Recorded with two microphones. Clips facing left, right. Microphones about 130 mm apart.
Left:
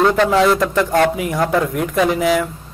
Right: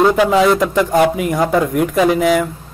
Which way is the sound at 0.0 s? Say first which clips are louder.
Right 2 dB; 5° right (ahead or behind).